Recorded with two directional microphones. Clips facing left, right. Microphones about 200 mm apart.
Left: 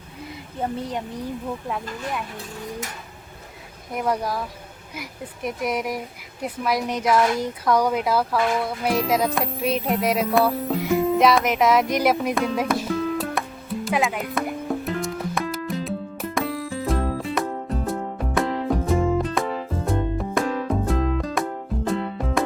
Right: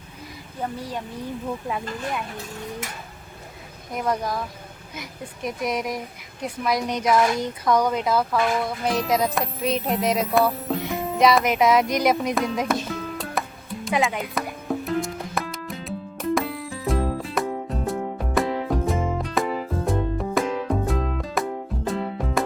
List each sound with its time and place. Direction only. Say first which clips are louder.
0.6 s speech: left 3 dB; 20° left (ahead or behind)
1.6 s speech: right 1 dB; centre (ahead or behind)
3.9 s speech: left 1 dB; 10° left (ahead or behind)
6.4 s a sound: even; 5° left (ahead or behind)
19.2 s music: even; centre (ahead or behind)